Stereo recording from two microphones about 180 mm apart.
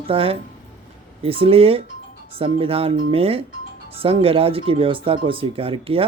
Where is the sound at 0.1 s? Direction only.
30° right (ahead or behind).